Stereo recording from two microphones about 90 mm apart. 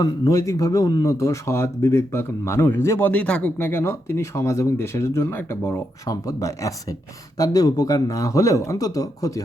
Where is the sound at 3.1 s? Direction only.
15° left (ahead or behind); by 9.4 s 40° left (ahead or behind).